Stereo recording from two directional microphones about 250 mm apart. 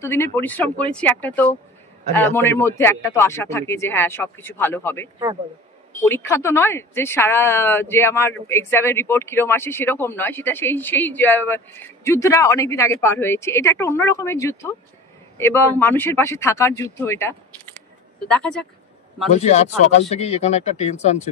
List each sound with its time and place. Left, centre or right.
0.0 s speech: centre
19.3 s speech: left